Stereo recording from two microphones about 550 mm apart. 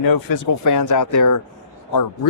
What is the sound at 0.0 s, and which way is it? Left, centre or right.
A man's voice, left.